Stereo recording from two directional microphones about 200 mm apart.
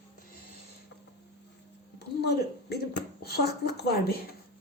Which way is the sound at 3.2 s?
55° left (ahead or behind).